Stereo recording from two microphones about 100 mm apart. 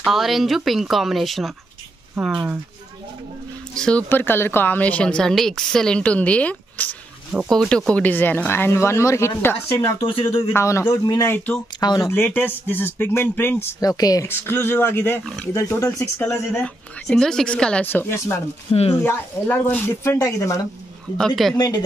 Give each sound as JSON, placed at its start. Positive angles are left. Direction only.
{"t": 0.0, "sound": "speech", "side_deg": 0}
{"t": 2.2, "sound": "speech", "side_deg": -10}
{"t": 3.7, "sound": "a woman's voice", "side_deg": 5}
{"t": 4.1, "sound": "a woman's voice", "side_deg": 20}
{"t": 9.8, "sound": "speech", "side_deg": 55}
{"t": 10.5, "sound": "speech", "side_deg": 25}
{"t": 12.1, "sound": "speech", "side_deg": 20}
{"t": 13.7, "sound": "speech", "side_deg": 40}
{"t": 14.2, "sound": "speech", "side_deg": 25}
{"t": 16.6, "sound": "a woman's voice", "side_deg": 5}
{"t": 17.8, "sound": "speech", "side_deg": 25}
{"t": 18.7, "sound": "speech", "side_deg": 85}
{"t": 19.0, "sound": "speech", "side_deg": 15}